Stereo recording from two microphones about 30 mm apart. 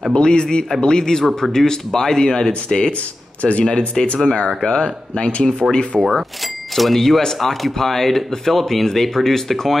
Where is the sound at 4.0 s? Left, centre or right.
Centre.